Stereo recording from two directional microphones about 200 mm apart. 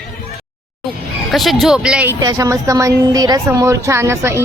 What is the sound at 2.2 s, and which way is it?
A woman's voice, 20° right (ahead or behind).